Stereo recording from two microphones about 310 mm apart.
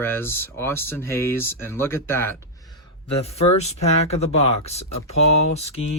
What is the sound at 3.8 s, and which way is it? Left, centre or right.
Speech, centre.